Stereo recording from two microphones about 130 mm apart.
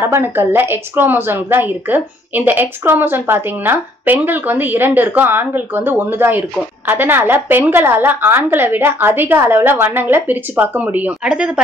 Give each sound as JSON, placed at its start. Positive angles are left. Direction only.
{"t": 0.0, "sound": "a woman's voice", "side_deg": -15}